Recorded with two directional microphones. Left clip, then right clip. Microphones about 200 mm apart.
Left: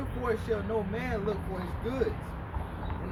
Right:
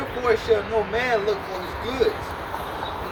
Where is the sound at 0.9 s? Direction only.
15° left (ahead or behind).